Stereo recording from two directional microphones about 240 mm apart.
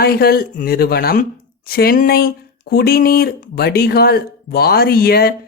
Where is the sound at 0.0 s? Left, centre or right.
Left.